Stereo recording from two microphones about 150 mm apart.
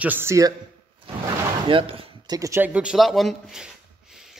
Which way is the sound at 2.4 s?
15° right (ahead or behind).